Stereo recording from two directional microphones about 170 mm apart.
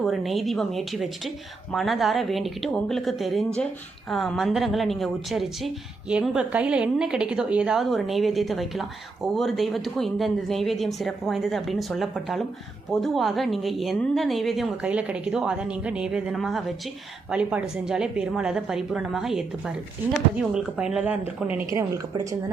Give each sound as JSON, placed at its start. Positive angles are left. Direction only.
{"t": 0.0, "sound": "a woman's voice", "side_deg": 0}
{"t": 21.8, "sound": "a woman's voice", "side_deg": -20}